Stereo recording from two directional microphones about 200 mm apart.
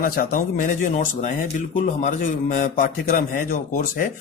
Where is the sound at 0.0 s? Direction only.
45° left (ahead or behind).